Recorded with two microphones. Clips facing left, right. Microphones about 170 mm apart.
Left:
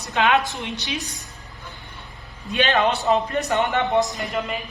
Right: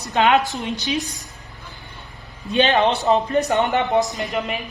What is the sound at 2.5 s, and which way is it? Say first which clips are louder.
A man's voice: right 3 dB; 25° right (ahead or behind).